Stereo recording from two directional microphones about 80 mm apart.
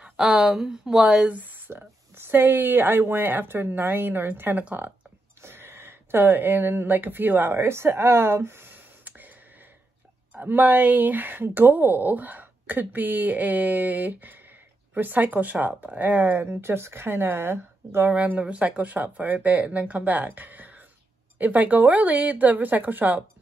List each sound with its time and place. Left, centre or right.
0.0 s speech: centre; by 9.3 s right
10.3 s speech: right
18.1 s speech: centre